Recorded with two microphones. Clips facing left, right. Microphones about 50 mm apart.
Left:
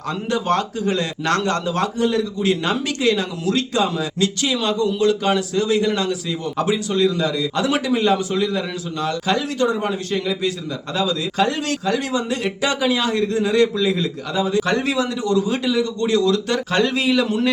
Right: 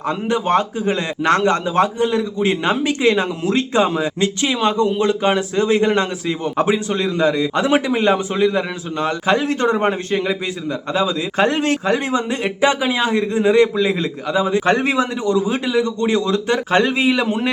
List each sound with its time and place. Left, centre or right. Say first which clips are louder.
0.1 s a man's voice: right 3 dB; right
10.1 s a man's voice: right 2 dB; right